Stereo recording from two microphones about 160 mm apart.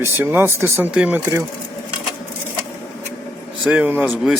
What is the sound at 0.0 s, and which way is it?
Speech, 15° right (ahead or behind).